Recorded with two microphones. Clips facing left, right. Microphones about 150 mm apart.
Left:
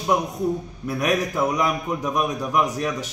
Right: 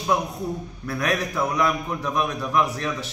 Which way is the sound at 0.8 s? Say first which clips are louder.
Left 3 dB; 15° left (ahead or behind).